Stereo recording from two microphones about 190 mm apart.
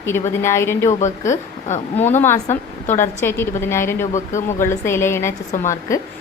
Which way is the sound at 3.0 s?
10° left (ahead or behind).